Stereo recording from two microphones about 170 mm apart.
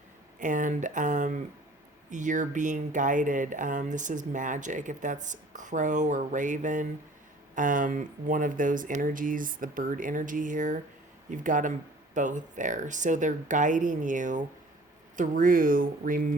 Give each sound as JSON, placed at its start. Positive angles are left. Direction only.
{"t": 0.3, "sound": "speech", "side_deg": -50}